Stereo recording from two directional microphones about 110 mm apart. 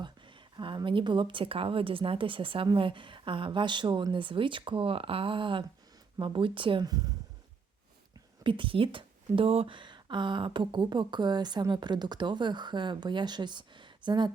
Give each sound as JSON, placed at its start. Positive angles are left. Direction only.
{"t": 0.5, "sound": "speech", "side_deg": -45}
{"t": 8.4, "sound": "speech", "side_deg": -50}